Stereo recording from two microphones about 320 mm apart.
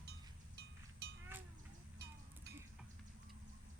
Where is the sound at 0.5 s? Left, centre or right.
Right.